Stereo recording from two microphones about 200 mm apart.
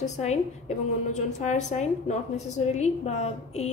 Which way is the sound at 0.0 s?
35° left (ahead or behind).